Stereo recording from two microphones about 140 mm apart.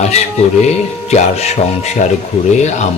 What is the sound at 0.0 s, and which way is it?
A man's voice, 50° left (ahead or behind).